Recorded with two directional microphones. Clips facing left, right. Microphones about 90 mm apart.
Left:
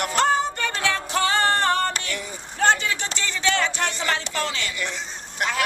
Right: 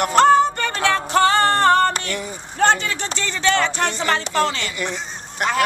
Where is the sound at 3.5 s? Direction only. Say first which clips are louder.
Right 4 dB; 60° right (ahead or behind).